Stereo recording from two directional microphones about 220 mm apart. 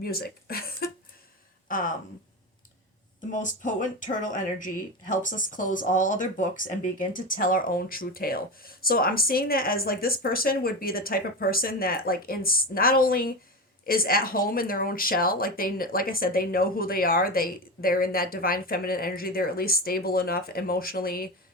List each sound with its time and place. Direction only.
0.0 s speech: 45° left (ahead or behind)
3.2 s speech: 35° left (ahead or behind)